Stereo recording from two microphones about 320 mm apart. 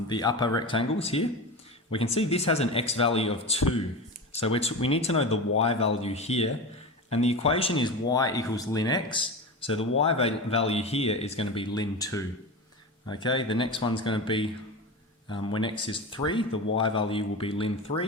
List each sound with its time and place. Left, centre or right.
0.1 s speech: centre